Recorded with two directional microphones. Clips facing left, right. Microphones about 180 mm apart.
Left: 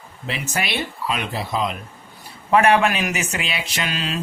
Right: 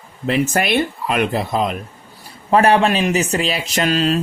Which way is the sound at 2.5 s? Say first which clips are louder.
Right 3 dB; 35° right (ahead or behind).